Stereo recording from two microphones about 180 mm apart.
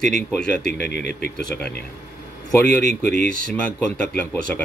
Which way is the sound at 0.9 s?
65° left (ahead or behind).